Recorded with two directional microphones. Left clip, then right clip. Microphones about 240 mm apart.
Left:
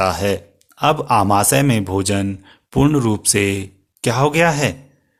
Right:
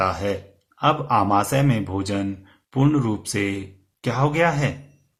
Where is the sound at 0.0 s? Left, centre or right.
Left.